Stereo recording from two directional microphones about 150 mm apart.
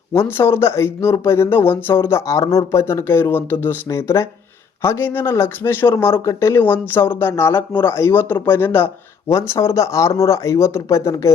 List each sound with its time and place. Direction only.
0.1 s speech: 15° left (ahead or behind)